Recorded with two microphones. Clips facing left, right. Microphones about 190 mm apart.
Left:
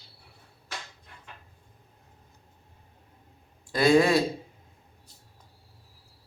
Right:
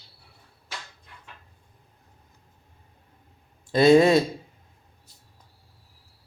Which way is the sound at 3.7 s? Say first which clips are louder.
Right 5 dB; 20° right (ahead or behind).